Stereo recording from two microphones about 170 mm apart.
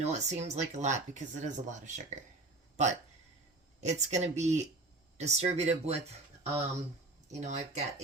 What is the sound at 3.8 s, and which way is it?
Speech, 40° right (ahead or behind).